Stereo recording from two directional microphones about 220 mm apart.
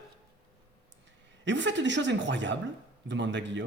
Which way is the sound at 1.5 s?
55° right (ahead or behind).